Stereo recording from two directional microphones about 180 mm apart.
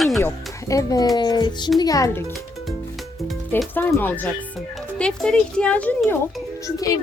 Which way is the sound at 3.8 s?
10° left (ahead or behind).